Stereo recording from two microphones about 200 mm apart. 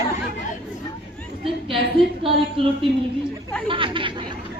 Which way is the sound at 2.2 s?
25° right (ahead or behind).